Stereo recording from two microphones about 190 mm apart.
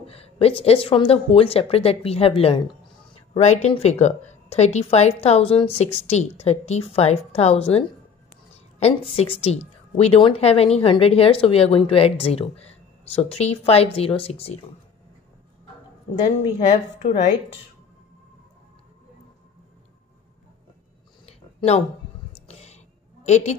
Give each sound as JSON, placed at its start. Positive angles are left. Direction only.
{"t": 0.0, "sound": "speech", "side_deg": 30}
{"t": 9.1, "sound": "speech", "side_deg": 30}
{"t": 16.6, "sound": "speech", "side_deg": 40}
{"t": 21.3, "sound": "a sound", "side_deg": 35}
{"t": 23.2, "sound": "a woman's voice", "side_deg": 35}